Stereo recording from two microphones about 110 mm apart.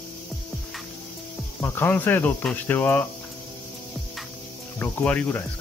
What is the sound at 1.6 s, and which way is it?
Speech, 20° left (ahead or behind).